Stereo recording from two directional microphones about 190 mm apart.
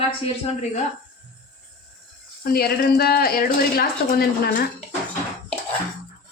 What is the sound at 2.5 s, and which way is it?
A woman's voice, 55° left (ahead or behind).